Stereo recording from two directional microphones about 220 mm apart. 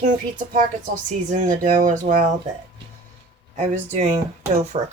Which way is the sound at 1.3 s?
35° right (ahead or behind).